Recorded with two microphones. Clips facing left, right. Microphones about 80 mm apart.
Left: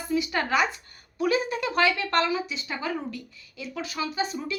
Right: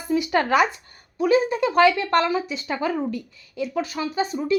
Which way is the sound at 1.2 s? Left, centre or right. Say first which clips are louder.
Right 6 dB; right.